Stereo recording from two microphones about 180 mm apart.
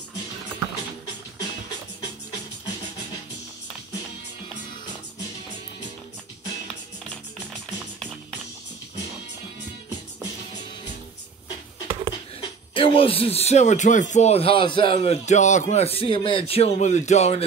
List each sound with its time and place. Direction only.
12.4 s speech: 30° left (ahead or behind)